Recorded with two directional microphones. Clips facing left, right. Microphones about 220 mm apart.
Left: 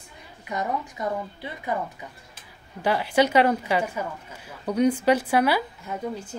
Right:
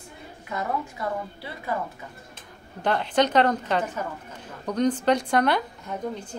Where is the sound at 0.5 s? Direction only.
20° left (ahead or behind).